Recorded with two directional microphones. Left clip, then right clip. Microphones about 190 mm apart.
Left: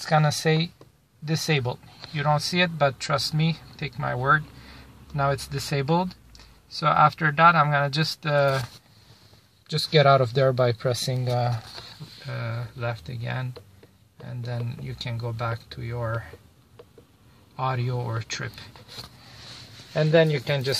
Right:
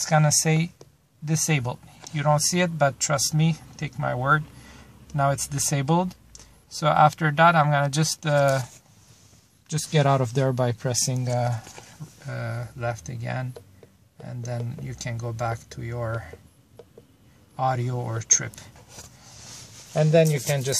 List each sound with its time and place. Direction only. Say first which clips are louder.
0.3 s speech: even; 10° right (ahead or behind)
10.0 s speech: left 4 dB; 5° right (ahead or behind)
15.0 s speech: right 2 dB; 10° right (ahead or behind)
17.6 s speech: right 3 dB; 5° right (ahead or behind)
19.9 s speech: even; 5° right (ahead or behind)